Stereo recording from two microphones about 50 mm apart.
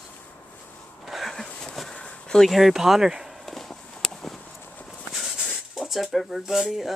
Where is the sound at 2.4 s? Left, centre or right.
Centre.